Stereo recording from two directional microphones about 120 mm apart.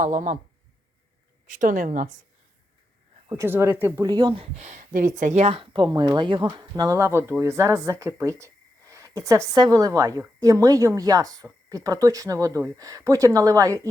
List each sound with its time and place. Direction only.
0.0 s a woman's voice: 90° right
1.5 s a woman's voice: 90° right
3.2 s speech: 25° right (ahead or behind)
4.0 s speech: 35° right (ahead or behind)
4.5 s speech: 75° right (ahead or behind)
5.5 s speech: 45° right (ahead or behind)
5.9 s speech: 35° right (ahead or behind)